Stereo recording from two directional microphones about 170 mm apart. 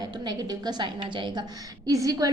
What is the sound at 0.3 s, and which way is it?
A woman's voice, 25° right (ahead or behind).